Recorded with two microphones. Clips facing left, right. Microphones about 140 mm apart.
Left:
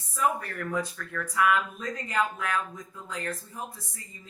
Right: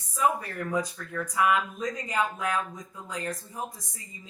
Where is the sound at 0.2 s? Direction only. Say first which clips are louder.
Right 1 dB; 10° right (ahead or behind).